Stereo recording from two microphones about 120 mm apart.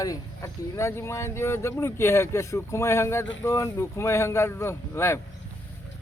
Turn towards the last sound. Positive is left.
turn(degrees=20)  # may be behind; listen again after turning